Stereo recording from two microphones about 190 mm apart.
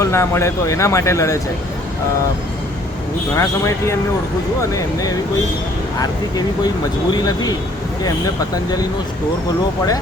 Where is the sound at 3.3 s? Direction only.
15° left (ahead or behind).